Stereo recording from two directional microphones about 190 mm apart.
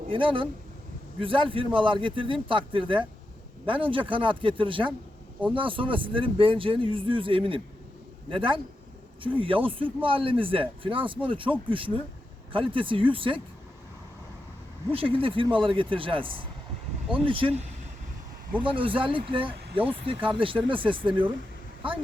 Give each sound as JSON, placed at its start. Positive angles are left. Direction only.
{"t": 0.1, "sound": "speech", "side_deg": -25}
{"t": 12.5, "sound": "speech", "side_deg": -25}
{"t": 14.9, "sound": "speech", "side_deg": -30}